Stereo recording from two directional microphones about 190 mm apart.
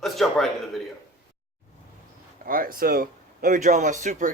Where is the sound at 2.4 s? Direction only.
50° right (ahead or behind).